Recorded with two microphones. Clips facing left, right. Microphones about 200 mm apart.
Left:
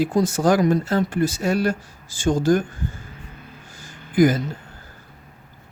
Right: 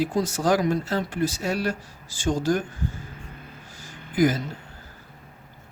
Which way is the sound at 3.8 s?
50° left (ahead or behind).